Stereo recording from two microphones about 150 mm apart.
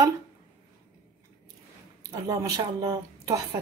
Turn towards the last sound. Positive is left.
turn(degrees=-30)  # may be behind; listen again after turning